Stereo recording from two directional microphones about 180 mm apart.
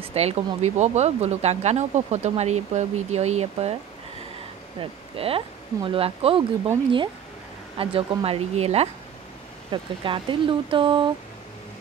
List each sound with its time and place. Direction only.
0.0 s speech: 35° right (ahead or behind)
4.7 s speech: 30° right (ahead or behind)
7.7 s speech: 30° right (ahead or behind)